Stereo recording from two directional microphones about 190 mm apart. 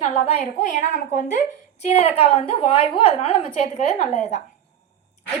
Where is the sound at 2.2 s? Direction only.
30° left (ahead or behind).